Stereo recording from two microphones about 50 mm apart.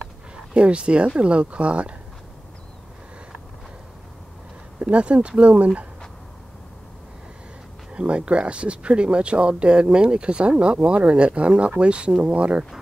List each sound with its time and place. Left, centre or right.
0.6 s speech: right
4.8 s speech: right
7.9 s speech: right